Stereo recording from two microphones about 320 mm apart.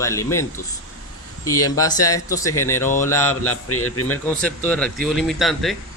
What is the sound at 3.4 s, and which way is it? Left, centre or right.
Speech, left.